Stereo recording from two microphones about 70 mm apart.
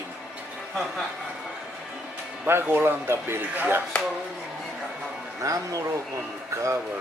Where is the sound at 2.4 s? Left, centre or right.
Right.